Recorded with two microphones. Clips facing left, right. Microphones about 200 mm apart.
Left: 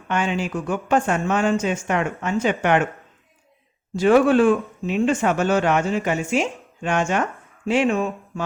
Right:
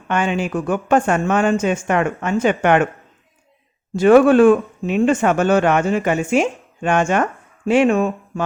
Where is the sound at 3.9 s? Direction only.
55° right (ahead or behind).